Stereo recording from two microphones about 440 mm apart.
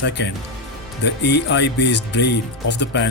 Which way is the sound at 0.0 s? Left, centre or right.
Left.